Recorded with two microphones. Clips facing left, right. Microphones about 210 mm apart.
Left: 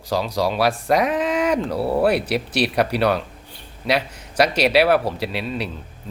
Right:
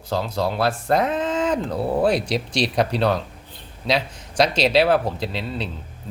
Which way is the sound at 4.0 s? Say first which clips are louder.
Even; 10° left (ahead or behind).